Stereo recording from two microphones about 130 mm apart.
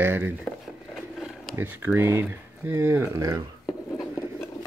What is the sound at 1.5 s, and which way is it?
Speech, 15° right (ahead or behind).